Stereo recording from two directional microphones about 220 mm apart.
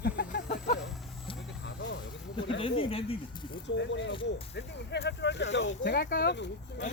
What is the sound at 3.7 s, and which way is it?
Speech, 55° left (ahead or behind).